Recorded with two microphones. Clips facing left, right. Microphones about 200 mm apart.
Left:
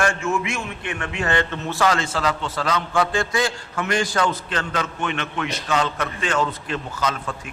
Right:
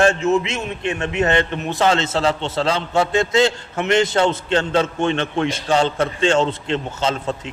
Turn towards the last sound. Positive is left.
turn(degrees=-25)  # may be behind; listen again after turning